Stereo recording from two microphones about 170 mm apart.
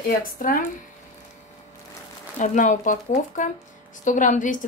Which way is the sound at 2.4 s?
50° left (ahead or behind).